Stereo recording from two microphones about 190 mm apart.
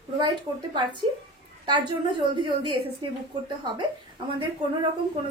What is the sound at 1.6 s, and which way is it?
A woman's voice, 25° right (ahead or behind).